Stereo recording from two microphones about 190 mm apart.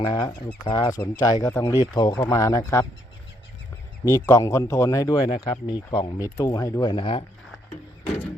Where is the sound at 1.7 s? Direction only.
20° left (ahead or behind).